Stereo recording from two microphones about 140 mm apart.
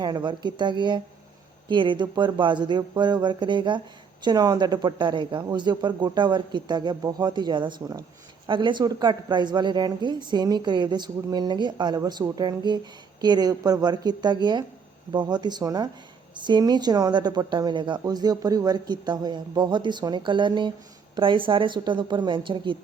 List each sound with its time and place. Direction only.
0.0 s a woman's voice: 30° right (ahead or behind)